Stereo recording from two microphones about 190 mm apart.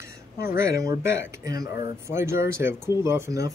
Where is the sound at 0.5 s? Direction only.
15° right (ahead or behind).